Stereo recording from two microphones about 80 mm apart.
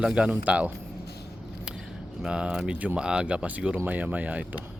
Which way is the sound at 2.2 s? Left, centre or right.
Centre.